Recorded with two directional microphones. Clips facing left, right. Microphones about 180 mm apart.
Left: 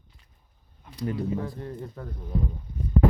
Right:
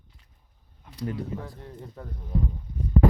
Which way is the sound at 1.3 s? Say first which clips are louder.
Left 5 dB; 5° left (ahead or behind).